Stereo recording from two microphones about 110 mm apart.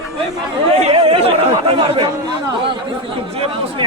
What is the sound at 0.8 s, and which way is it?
Speech, 65° right (ahead or behind).